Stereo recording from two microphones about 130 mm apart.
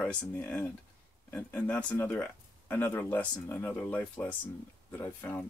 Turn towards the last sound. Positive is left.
turn(degrees=15)  # may be behind; listen again after turning